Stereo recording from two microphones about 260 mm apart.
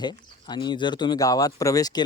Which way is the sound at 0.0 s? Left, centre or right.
Centre.